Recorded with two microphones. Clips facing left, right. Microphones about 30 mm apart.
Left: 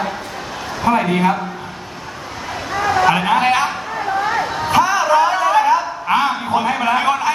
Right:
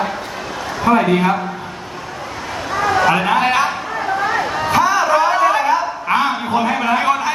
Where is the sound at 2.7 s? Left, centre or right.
Centre.